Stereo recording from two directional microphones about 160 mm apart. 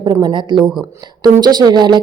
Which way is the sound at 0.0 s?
25° right (ahead or behind).